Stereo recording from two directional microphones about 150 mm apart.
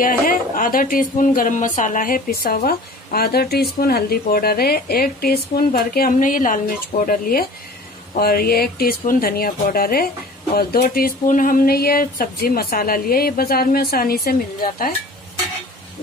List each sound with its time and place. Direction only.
0.0 s speech: 70° left (ahead or behind)
8.1 s speech: 90° left